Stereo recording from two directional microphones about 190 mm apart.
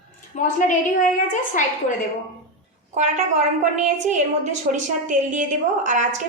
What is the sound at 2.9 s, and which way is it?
Speech, 40° right (ahead or behind).